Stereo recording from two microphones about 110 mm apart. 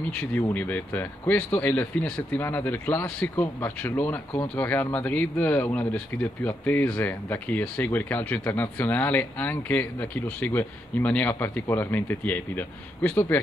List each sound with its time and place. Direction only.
0.2 s speech: 15° left (ahead or behind)